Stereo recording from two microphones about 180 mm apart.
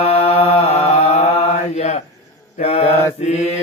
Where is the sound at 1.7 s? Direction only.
40° left (ahead or behind).